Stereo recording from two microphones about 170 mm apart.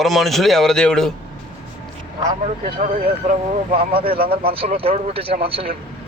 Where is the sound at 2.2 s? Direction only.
30° right (ahead or behind).